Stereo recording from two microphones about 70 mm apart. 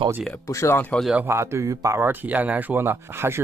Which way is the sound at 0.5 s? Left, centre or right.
Left.